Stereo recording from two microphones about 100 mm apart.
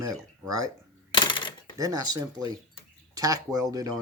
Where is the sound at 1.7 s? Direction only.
35° right (ahead or behind).